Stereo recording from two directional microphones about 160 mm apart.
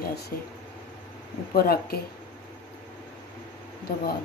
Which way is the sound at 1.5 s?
70° left (ahead or behind).